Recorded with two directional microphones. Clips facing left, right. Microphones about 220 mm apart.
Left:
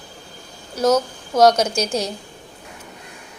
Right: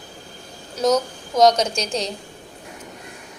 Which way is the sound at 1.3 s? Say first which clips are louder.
Left 1 dB; 5° left (ahead or behind).